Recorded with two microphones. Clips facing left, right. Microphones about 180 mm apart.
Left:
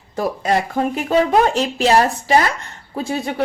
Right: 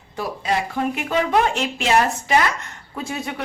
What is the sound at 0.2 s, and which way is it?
Speech, 45° left (ahead or behind).